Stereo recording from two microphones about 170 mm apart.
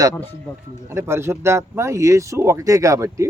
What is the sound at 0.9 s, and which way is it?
A man's voice, 15° right (ahead or behind).